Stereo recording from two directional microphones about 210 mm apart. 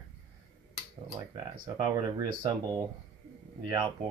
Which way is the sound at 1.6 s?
20° right (ahead or behind).